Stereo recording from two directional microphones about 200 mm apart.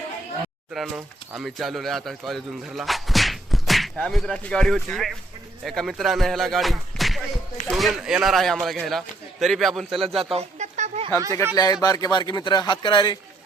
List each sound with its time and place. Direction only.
0.7 s speech: 5° right (ahead or behind)
10.2 s a sound: 30° right (ahead or behind)
11.5 s speech: 20° left (ahead or behind)